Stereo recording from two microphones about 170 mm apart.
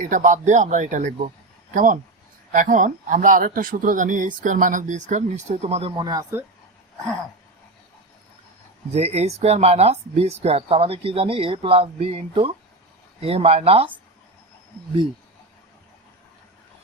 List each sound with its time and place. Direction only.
0.0 s speech: 50° right (ahead or behind)
6.0 s speech: 20° right (ahead or behind)
8.9 s speech: 40° right (ahead or behind)